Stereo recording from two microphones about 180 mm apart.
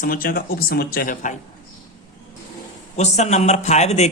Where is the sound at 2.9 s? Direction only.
40° left (ahead or behind).